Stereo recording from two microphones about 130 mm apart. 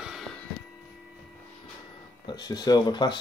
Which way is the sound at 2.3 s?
30° left (ahead or behind).